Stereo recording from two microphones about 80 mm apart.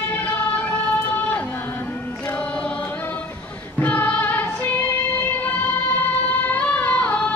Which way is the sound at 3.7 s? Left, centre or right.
Left.